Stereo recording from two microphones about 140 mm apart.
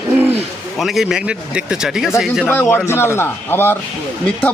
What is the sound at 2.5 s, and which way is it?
A man's voice, 15° left (ahead or behind).